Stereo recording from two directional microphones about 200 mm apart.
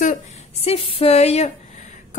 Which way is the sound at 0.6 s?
30° left (ahead or behind).